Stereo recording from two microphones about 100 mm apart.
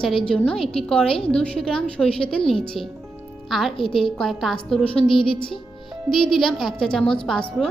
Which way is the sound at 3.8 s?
60° left (ahead or behind).